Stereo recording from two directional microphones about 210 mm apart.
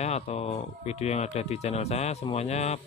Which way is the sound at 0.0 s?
30° left (ahead or behind).